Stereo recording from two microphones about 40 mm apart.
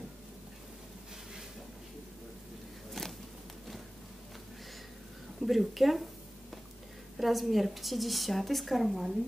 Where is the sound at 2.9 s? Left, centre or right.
Centre.